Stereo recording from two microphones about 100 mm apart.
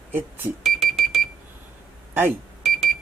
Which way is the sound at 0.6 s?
Centre (ahead or behind).